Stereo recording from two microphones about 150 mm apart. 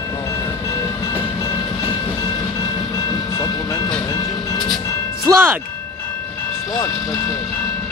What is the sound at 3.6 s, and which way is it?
Vehicle, 25° left (ahead or behind).